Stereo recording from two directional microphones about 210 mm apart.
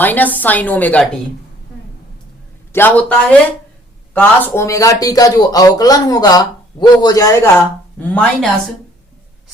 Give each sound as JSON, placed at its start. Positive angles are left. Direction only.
{"t": 0.0, "sound": "speech", "side_deg": 10}
{"t": 2.7, "sound": "speech", "side_deg": 10}